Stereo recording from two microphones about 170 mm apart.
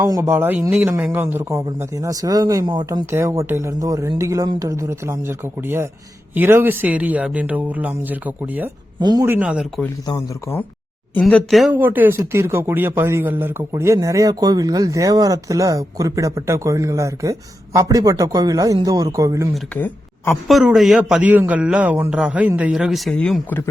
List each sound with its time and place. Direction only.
0.0 s a man's voice: 15° right (ahead or behind)
9.0 s speech: 25° right (ahead or behind)
9.2 s a man's voice: 10° right (ahead or behind)
11.3 s a man's voice: 5° left (ahead or behind)
11.7 s a man's voice: 10° right (ahead or behind)
19.5 s speech: 10° left (ahead or behind)
20.3 s a man's voice: centre (ahead or behind)